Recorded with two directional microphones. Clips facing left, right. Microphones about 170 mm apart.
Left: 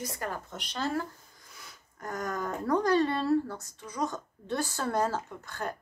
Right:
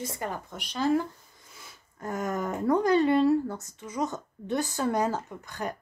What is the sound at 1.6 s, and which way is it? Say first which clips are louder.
A woman's voice: right 3 dB; 25° right (ahead or behind).